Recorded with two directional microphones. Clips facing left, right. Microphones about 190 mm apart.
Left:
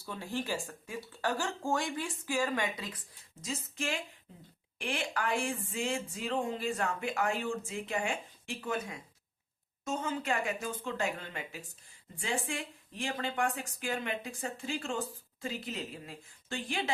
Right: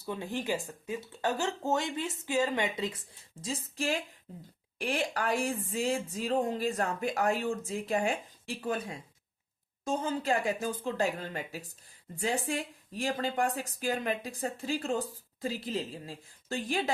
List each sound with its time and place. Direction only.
0.0 s speech: 20° right (ahead or behind); by 16.9 s 40° right (ahead or behind)